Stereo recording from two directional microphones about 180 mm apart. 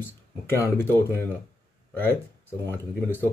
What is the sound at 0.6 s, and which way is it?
Speech, 15° left (ahead or behind).